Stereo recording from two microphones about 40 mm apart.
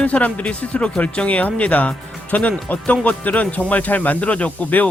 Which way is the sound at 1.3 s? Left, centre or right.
Left.